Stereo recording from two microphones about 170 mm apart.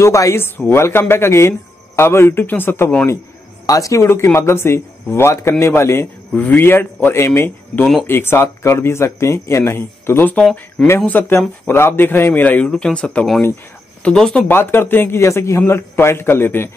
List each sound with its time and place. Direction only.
0.0 s speech: 15° left (ahead or behind)